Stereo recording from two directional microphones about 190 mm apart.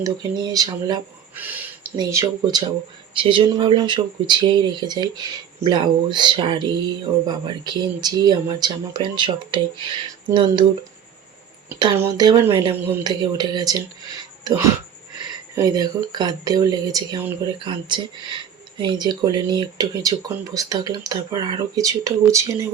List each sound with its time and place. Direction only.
0.0 s speech: 20° right (ahead or behind)
1.4 s a sound: 10° right (ahead or behind)
2.0 s speech: 15° right (ahead or behind)
11.8 s speech: 20° right (ahead or behind)